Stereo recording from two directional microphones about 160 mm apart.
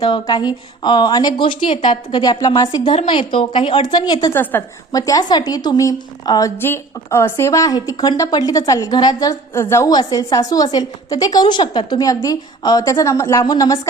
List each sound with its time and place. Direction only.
0.0 s a woman's voice: 30° left (ahead or behind)